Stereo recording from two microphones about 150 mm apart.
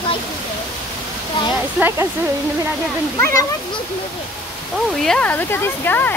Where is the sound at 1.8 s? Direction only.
15° right (ahead or behind).